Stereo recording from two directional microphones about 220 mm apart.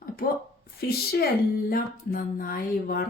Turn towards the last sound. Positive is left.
turn(degrees=40)  # may be behind; listen again after turning